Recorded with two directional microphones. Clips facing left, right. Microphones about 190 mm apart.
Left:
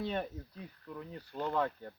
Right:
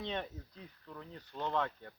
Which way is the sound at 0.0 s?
5° left (ahead or behind).